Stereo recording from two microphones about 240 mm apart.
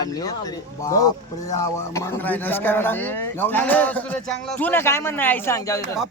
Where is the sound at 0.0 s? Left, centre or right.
Centre.